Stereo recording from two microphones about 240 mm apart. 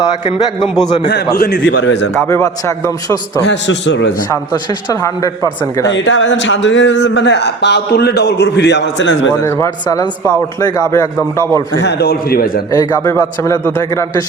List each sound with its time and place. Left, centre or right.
0.3 s a man's voice: centre
1.0 s speech: left
2.1 s a man's voice: centre
3.4 s speech: left
4.3 s a man's voice: centre
5.9 s speech: left
9.4 s a man's voice: centre
11.7 s a man's voice: left
12.7 s a man's voice: centre